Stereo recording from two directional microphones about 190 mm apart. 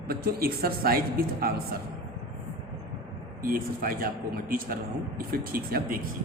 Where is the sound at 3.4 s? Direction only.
50° right (ahead or behind).